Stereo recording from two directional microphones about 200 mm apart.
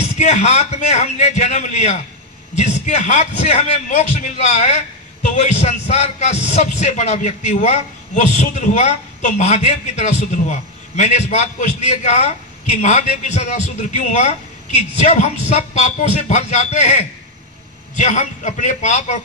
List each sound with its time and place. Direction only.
0.2 s a man's voice: 35° left (ahead or behind)